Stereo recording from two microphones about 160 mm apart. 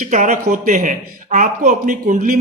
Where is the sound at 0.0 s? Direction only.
55° right (ahead or behind).